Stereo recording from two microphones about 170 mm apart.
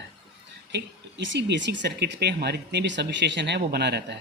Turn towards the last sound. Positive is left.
turn(degrees=-80)